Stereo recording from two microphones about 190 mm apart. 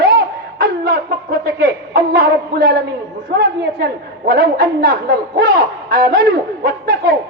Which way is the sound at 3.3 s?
55° right (ahead or behind).